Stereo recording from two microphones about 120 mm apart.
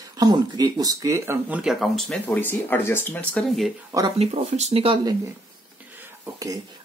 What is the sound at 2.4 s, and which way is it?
Speech, 15° left (ahead or behind).